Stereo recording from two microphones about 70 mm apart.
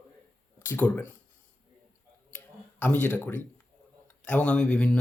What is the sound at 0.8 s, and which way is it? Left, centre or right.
Speech, left.